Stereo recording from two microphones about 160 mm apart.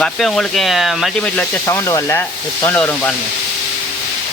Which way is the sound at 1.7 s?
20° left (ahead or behind).